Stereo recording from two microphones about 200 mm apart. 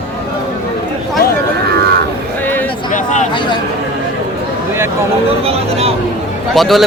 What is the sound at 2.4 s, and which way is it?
Music, 10° left (ahead or behind).